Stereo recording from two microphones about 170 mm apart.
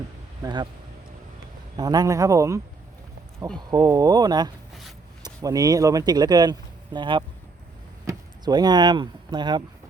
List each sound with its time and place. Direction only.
0.4 s speech: 25° right (ahead or behind)
1.7 s speech: 25° right (ahead or behind)
3.7 s speech: 20° right (ahead or behind)